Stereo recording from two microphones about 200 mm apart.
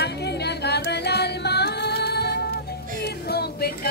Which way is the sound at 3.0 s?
50° left (ahead or behind).